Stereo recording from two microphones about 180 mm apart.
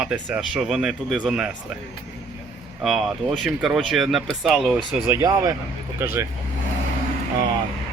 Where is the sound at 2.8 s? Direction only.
Centre (ahead or behind).